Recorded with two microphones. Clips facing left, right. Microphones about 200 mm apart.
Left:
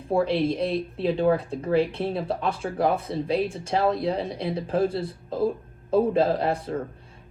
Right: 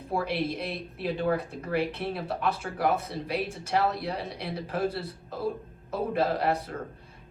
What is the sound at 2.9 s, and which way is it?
Speech, 50° left (ahead or behind).